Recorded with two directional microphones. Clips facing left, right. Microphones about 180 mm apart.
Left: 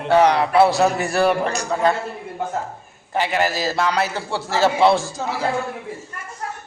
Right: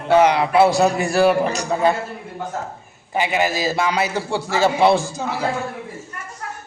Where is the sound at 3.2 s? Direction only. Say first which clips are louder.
Right 1 dB; 15° right (ahead or behind).